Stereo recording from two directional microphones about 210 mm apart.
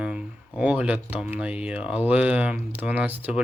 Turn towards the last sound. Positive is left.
turn(degrees=-10)  # may be behind; listen again after turning